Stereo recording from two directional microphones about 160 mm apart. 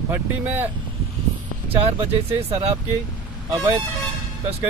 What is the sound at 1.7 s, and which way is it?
Speech, 40° right (ahead or behind).